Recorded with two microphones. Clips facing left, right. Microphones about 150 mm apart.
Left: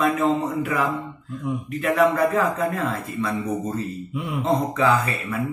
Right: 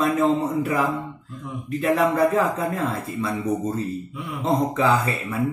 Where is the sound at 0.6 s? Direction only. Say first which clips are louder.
Right 1 dB; 30° right (ahead or behind).